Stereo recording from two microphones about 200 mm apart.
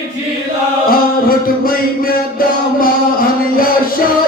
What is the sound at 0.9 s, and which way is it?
Music, 45° left (ahead or behind).